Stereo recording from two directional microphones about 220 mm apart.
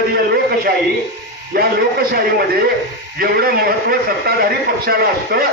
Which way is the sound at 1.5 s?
45° right (ahead or behind).